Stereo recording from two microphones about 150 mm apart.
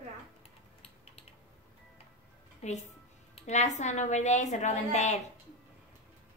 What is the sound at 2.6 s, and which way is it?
Music, 45° left (ahead or behind).